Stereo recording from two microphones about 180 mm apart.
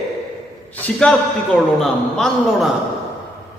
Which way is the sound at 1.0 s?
5° left (ahead or behind).